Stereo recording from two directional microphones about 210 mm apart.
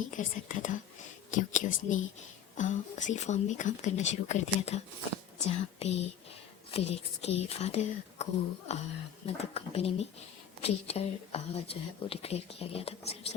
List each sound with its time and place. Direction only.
0.1 s a woman's voice: 35° left (ahead or behind)